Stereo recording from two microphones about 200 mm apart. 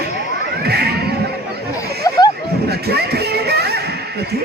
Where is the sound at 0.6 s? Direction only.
50° right (ahead or behind).